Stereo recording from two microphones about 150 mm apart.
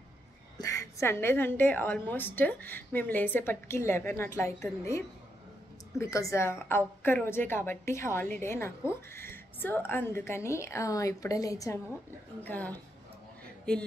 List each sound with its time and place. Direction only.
0.6 s a woman's voice: 20° left (ahead or behind)
12.4 s a woman's voice: 10° left (ahead or behind)